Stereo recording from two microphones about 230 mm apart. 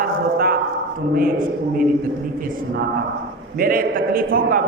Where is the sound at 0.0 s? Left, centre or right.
Right.